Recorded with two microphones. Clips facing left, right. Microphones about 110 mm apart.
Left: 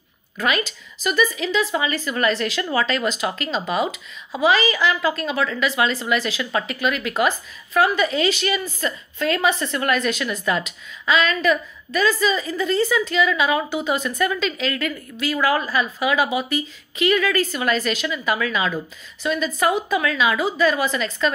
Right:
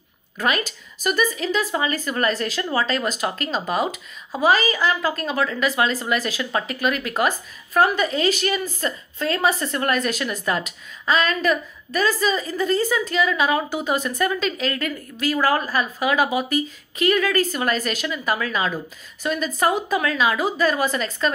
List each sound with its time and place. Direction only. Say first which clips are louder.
0.4 s a woman's voice: even; 40° right (ahead or behind)